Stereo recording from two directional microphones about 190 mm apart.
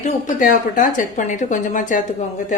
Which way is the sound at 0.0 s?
45° left (ahead or behind).